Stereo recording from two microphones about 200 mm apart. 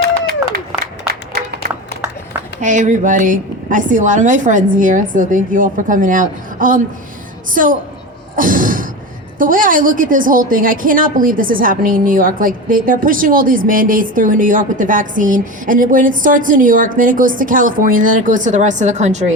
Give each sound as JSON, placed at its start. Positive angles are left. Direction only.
{"t": 0.7, "sound": "applause", "side_deg": -5}
{"t": 2.6, "sound": "a woman's voice", "side_deg": -40}
{"t": 8.4, "sound": "a sound", "side_deg": -40}
{"t": 9.4, "sound": "a woman's voice", "side_deg": -45}